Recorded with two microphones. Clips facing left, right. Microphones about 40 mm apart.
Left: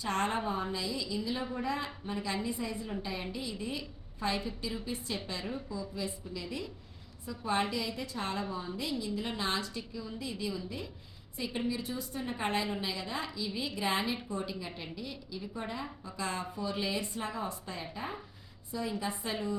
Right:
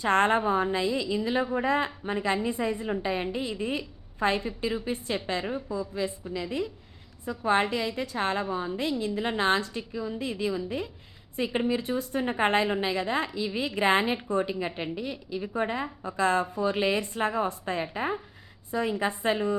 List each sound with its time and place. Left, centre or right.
0.0 s a woman's voice: right